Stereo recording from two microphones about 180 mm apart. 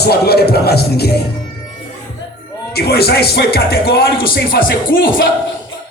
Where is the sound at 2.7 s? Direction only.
60° left (ahead or behind).